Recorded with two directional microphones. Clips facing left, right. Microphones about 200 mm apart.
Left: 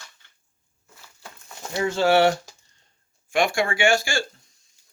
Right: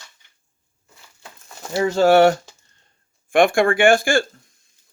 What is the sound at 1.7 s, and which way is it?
Speech, 35° right (ahead or behind).